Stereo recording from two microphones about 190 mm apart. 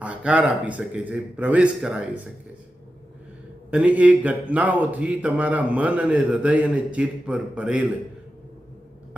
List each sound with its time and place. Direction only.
0.0 s speech: 5° right (ahead or behind)
3.7 s speech: 5° right (ahead or behind)